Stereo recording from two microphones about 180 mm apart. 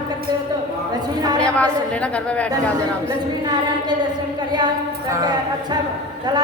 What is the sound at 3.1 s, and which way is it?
Speech, 25° right (ahead or behind).